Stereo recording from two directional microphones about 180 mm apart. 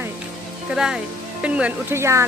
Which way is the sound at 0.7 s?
5° right (ahead or behind).